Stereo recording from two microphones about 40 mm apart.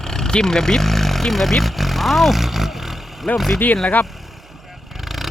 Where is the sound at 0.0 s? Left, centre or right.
Centre.